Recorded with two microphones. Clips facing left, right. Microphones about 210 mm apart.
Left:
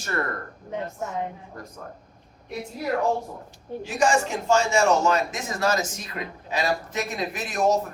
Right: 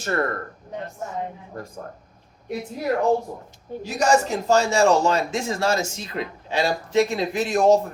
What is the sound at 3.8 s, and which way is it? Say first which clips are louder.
A man's voice: right 2 dB; 40° right (ahead or behind).